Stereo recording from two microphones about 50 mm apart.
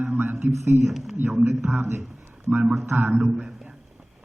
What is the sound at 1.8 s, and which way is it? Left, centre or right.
Speech, right.